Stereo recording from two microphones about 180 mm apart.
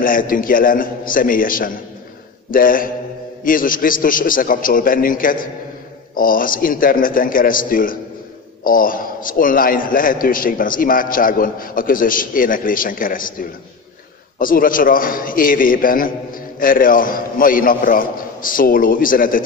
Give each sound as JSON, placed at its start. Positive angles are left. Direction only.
{"t": 0.0, "sound": "a man's voice", "side_deg": 50}